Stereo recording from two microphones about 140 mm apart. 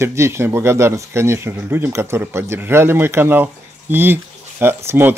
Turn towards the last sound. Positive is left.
turn(degrees=-10)  # may be behind; listen again after turning